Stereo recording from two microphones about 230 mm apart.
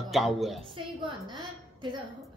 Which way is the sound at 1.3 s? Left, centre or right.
Centre.